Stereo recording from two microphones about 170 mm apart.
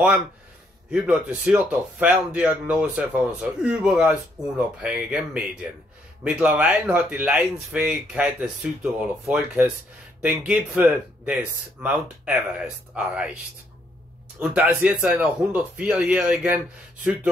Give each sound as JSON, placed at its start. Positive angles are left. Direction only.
{"t": 0.8, "sound": "speech", "side_deg": -5}
{"t": 14.4, "sound": "speech", "side_deg": -10}